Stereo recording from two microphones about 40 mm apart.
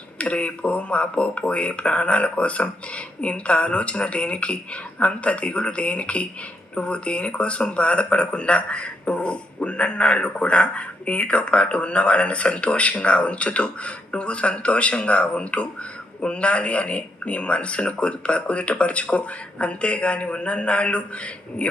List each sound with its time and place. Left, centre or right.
0.2 s speech: left